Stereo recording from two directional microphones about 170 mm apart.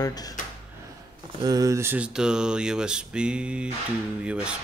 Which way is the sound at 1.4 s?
20° right (ahead or behind).